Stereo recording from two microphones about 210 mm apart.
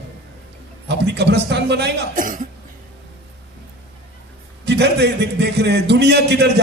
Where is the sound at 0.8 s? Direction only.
55° right (ahead or behind).